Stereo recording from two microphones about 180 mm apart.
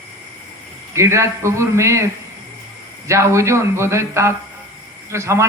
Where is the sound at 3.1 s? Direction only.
15° right (ahead or behind).